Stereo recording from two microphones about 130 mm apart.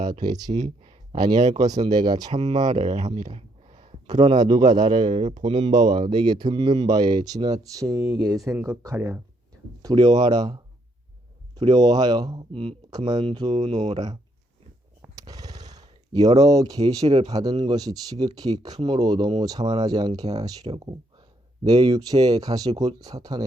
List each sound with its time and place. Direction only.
0.1 s speech: 35° right (ahead or behind)
0.6 s speech: 50° right (ahead or behind)
1.1 s speech: 35° right (ahead or behind)
2.3 s speech: 60° right (ahead or behind)
3.2 s a sound: 55° right (ahead or behind)
4.3 s speech: 35° right (ahead or behind)
5.1 s speech: 60° right (ahead or behind)
5.9 s speech: 35° right (ahead or behind)
9.9 s speech: 35° right (ahead or behind)
12.9 s speech: 30° right (ahead or behind)
15.1 s a sound: 30° right (ahead or behind)
16.4 s speech: 30° right (ahead or behind)